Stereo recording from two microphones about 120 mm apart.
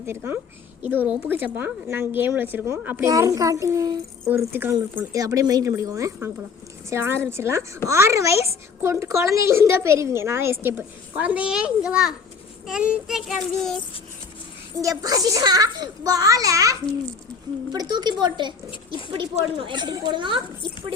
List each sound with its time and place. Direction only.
0.0 s a child's voice: 20° right (ahead or behind)
4.3 s a woman's voice: 20° right (ahead or behind)
5.1 s a child's voice: 30° right (ahead or behind); by 13.8 s centre (ahead or behind)
14.8 s a child's voice: 30° right (ahead or behind)